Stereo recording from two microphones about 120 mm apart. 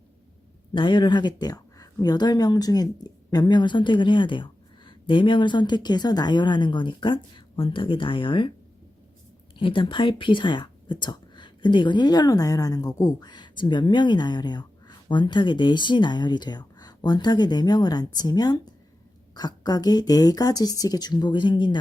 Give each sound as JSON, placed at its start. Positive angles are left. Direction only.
{"t": 0.7, "sound": "speech", "side_deg": 40}
{"t": 9.6, "sound": "speech", "side_deg": 45}